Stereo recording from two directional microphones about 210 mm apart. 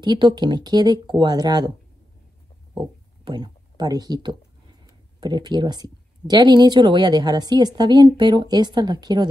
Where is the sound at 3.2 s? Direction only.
20° right (ahead or behind).